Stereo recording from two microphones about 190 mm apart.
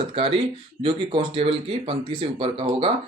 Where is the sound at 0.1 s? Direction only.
30° right (ahead or behind).